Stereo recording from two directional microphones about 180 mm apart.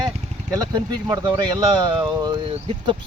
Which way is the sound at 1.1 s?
20° right (ahead or behind).